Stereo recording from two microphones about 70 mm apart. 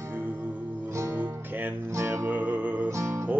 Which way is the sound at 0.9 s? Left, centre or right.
Right.